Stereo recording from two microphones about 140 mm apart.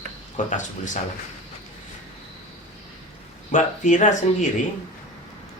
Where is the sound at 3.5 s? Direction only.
65° left (ahead or behind).